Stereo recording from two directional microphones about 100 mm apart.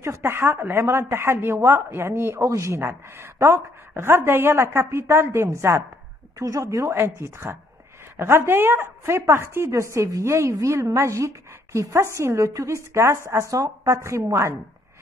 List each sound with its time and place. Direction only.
0.0 s a woman's voice: 25° right (ahead or behind)